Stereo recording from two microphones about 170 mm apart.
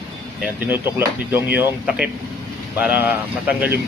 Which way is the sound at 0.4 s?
10° right (ahead or behind).